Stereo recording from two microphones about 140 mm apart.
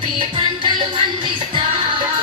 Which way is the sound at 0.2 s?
35° right (ahead or behind).